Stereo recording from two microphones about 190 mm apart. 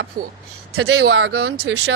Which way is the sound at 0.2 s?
55° right (ahead or behind).